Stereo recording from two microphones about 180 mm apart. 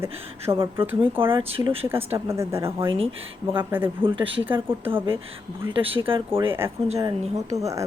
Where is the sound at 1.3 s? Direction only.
30° right (ahead or behind).